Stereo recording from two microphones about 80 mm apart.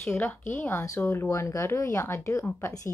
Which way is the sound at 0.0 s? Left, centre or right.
Left.